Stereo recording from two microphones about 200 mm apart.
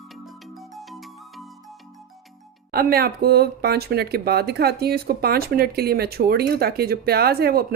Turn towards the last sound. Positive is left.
turn(degrees=-50)  # may be behind; listen again after turning